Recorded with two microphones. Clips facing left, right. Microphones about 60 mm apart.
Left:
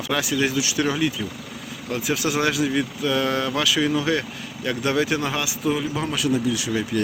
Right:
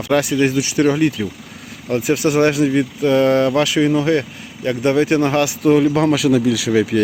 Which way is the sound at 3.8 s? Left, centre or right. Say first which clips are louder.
Right 6 dB; right.